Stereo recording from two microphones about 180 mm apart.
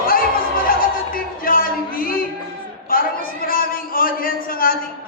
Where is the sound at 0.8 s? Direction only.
50° left (ahead or behind).